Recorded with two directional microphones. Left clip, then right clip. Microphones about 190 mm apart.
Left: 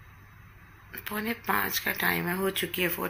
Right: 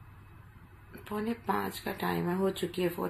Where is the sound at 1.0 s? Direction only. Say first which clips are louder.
Left 3 dB; centre (ahead or behind).